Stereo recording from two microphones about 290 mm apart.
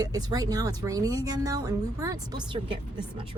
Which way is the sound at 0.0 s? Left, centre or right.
Centre.